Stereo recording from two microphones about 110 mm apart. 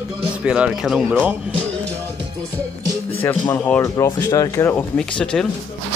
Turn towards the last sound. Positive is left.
turn(degrees=5)  # may be behind; listen again after turning